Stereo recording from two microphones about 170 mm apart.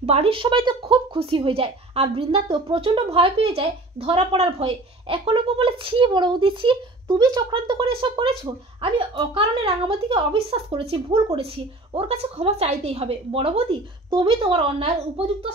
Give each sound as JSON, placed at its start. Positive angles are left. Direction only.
{"t": 0.0, "sound": "a woman's voice", "side_deg": -35}